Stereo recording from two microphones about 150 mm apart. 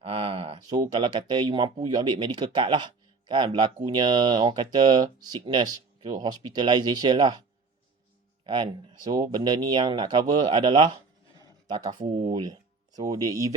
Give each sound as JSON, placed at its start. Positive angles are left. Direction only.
{"t": 0.0, "sound": "a sound", "side_deg": -40}
{"t": 0.7, "sound": "speech", "side_deg": -30}
{"t": 8.4, "sound": "speech", "side_deg": -30}